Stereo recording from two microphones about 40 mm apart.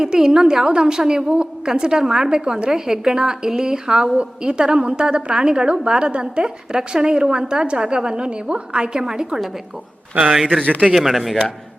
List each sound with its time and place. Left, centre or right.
0.0 s a woman's voice: centre